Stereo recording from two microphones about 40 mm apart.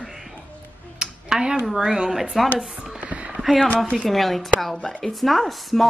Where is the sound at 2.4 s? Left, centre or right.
Centre.